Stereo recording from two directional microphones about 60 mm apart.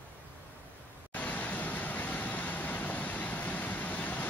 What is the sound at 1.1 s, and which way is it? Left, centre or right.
Vehicle, left.